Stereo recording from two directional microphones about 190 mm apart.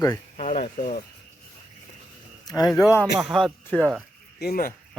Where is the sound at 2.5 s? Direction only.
20° left (ahead or behind).